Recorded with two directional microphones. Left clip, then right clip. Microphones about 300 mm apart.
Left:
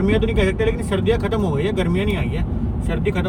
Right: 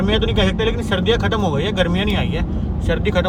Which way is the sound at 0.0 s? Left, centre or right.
Centre.